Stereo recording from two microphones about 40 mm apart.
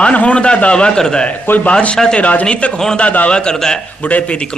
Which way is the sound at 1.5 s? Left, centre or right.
Left.